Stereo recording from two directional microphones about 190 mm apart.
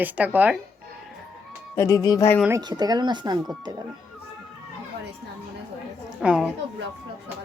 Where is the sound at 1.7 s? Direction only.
15° left (ahead or behind).